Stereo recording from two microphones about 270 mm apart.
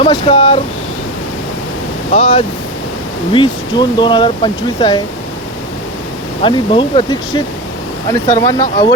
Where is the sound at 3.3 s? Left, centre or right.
Centre.